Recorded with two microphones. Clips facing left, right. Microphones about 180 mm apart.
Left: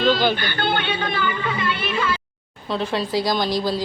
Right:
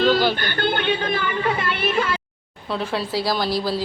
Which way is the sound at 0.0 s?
5° right (ahead or behind).